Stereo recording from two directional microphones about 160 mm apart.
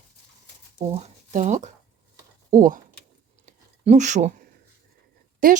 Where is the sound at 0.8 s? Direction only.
40° right (ahead or behind).